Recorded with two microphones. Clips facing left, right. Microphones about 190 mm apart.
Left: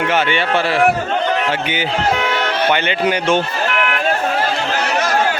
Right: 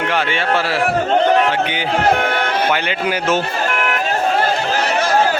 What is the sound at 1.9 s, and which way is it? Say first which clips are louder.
Music: right 3 dB; 55° right (ahead or behind).